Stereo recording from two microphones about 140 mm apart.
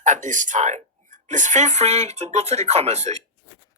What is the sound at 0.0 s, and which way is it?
Speech, 60° right (ahead or behind).